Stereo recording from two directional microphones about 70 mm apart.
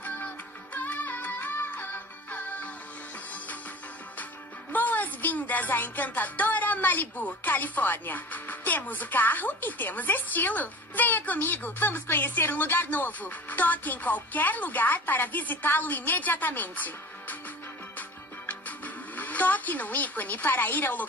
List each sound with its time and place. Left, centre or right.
0.0 s music: left
4.7 s speech: left
18.5 s music: left